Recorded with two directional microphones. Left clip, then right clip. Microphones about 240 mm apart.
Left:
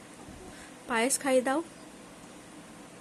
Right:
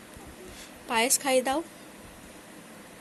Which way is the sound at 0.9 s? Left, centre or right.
Centre.